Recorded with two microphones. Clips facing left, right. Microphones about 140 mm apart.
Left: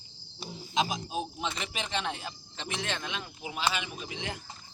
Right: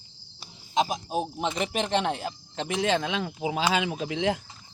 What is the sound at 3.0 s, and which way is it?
Speech, 90° right.